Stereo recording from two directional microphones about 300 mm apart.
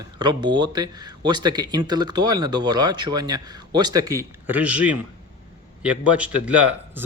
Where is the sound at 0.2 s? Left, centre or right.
Centre.